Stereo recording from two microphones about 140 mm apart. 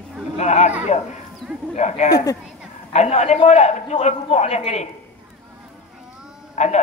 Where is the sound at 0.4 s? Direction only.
50° left (ahead or behind).